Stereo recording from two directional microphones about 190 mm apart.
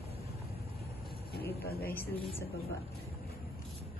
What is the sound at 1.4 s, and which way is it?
Speech, 55° left (ahead or behind).